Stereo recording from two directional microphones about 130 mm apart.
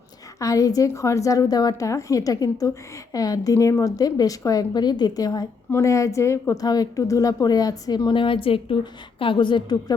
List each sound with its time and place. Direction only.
0.3 s a woman's voice: 25° left (ahead or behind)